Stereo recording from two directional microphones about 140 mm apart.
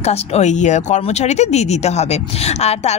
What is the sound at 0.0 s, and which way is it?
A woman's voice, 45° left (ahead or behind).